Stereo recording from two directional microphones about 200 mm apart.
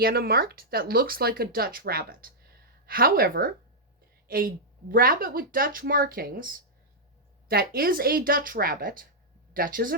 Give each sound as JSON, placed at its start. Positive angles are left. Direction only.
{"t": 0.0, "sound": "speech", "side_deg": -50}